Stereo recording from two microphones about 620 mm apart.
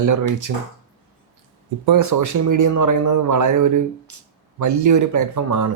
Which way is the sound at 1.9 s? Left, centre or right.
Right.